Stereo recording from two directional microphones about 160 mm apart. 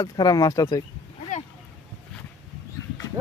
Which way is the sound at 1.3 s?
50° left (ahead or behind).